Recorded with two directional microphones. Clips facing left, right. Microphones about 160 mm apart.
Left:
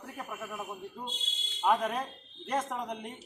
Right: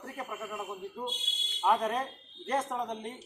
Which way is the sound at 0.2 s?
Centre (ahead or behind).